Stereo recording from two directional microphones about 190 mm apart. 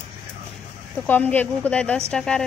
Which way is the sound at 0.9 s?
10° left (ahead or behind).